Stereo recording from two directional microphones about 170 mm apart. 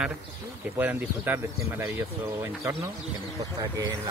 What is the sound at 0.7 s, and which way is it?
Speech, 10° right (ahead or behind).